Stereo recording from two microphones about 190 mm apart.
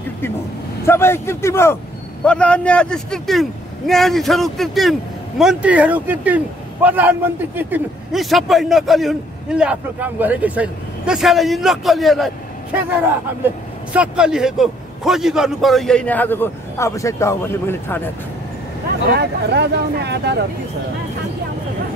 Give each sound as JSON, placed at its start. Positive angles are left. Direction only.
{"t": 0.8, "sound": "a man's voice", "side_deg": 10}
{"t": 13.9, "sound": "a man's voice", "side_deg": -5}
{"t": 19.1, "sound": "speech", "side_deg": -60}